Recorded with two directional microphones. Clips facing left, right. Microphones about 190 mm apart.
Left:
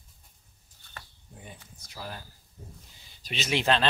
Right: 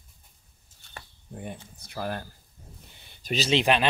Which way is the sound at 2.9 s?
60° right (ahead or behind).